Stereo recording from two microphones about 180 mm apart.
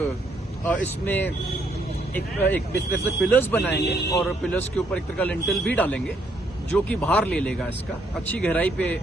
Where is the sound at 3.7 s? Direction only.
65° left (ahead or behind).